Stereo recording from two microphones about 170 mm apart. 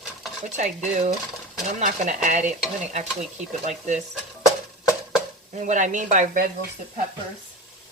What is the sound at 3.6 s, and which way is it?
Speech, 45° right (ahead or behind).